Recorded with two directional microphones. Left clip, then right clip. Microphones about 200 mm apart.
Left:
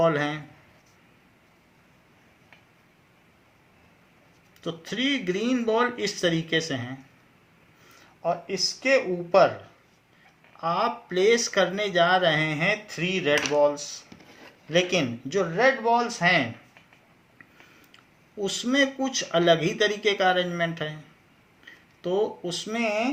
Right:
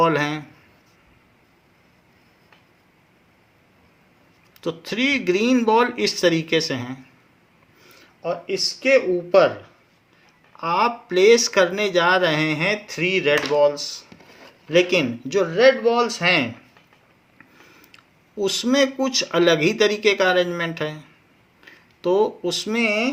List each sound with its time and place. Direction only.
0.0 s speech: 45° right (ahead or behind)
4.6 s speech: 45° right (ahead or behind)
8.2 s speech: 45° right (ahead or behind)
10.6 s speech: 45° right (ahead or behind)
17.9 s speech: 45° right (ahead or behind)